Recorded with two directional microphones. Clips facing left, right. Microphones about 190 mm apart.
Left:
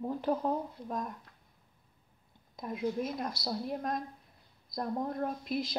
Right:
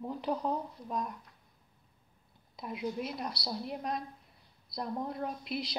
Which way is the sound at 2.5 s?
45° left (ahead or behind).